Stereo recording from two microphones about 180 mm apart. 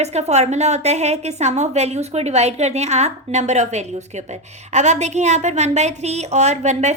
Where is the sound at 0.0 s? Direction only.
35° right (ahead or behind).